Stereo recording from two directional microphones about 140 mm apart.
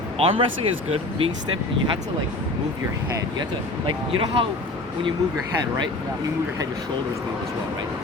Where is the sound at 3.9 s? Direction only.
40° right (ahead or behind).